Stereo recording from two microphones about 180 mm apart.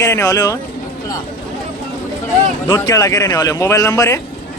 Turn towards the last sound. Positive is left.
turn(degrees=15)  # may be behind; listen again after turning